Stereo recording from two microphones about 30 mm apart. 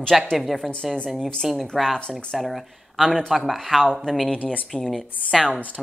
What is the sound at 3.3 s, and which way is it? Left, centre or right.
Speech, centre.